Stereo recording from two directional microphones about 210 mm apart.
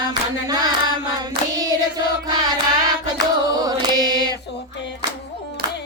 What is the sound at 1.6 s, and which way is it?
Child singing, 20° right (ahead or behind).